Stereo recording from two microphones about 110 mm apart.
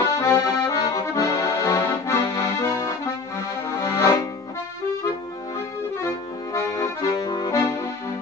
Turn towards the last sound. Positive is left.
turn(degrees=30)  # may be behind; listen again after turning